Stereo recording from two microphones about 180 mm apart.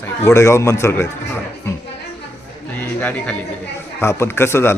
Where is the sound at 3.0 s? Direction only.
10° left (ahead or behind).